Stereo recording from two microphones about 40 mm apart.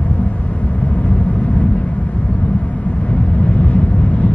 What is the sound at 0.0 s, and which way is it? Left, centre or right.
Vehicle, left.